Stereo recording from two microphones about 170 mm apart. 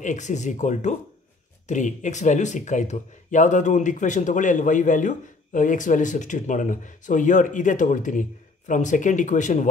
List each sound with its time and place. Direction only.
0.0 s speech: 45° left (ahead or behind)